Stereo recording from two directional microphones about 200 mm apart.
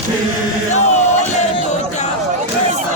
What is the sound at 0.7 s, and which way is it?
Chant, 35° left (ahead or behind).